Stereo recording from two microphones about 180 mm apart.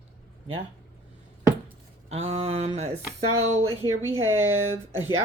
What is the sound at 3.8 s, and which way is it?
Speech, 15° right (ahead or behind).